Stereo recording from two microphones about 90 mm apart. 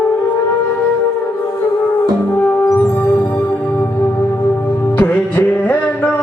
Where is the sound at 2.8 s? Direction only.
20° left (ahead or behind).